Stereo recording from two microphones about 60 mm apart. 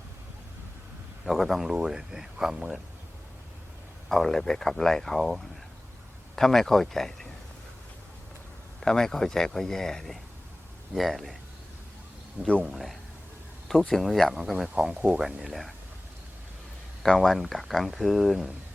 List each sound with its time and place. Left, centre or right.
1.2 s speech: centre
1.7 s speech: centre
4.1 s speech: centre
8.8 s speech: centre
12.4 s speech: right
12.7 s speech: centre
17.0 s speech: centre